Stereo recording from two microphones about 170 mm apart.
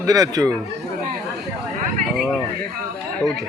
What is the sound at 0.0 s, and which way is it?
Speech, 20° right (ahead or behind).